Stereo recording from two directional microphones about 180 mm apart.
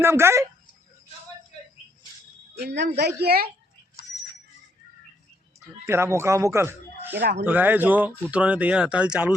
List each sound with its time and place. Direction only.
0.0 s speech: 15° right (ahead or behind)
2.6 s a man's voice: 70° right (ahead or behind)
3.2 s a child's voice: 60° right (ahead or behind)
5.8 s speech: 15° right (ahead or behind)
7.2 s a man's voice: 70° right (ahead or behind)
7.4 s speech: 10° right (ahead or behind)